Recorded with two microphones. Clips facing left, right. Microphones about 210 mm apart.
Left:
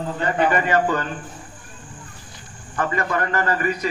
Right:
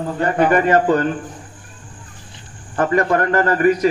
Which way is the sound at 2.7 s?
50° right (ahead or behind).